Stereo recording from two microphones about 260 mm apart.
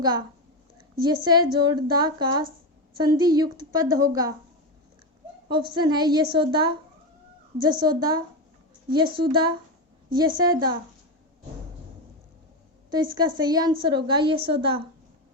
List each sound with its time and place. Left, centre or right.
0.0 s a woman's voice: centre
5.5 s a woman's voice: centre
12.9 s a woman's voice: centre